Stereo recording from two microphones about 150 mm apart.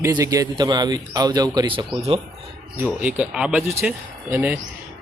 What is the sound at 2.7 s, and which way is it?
Speech, 10° right (ahead or behind).